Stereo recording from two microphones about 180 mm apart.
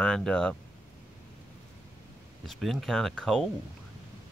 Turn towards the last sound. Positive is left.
turn(degrees=5)  # may be behind; listen again after turning